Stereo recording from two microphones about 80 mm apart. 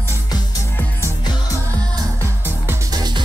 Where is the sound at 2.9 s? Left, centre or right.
Right.